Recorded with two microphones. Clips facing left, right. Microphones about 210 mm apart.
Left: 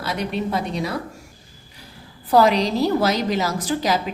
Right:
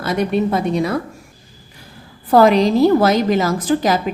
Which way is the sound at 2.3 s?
50° right (ahead or behind).